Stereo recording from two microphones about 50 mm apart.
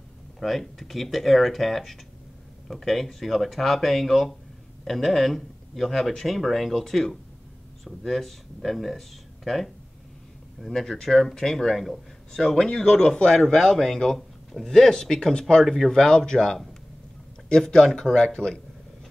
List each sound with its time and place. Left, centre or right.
0.4 s speech: centre